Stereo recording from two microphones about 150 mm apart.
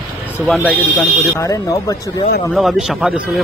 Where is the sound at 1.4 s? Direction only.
20° left (ahead or behind).